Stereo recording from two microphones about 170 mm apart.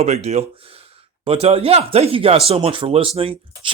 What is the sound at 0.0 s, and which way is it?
Speech, 40° right (ahead or behind).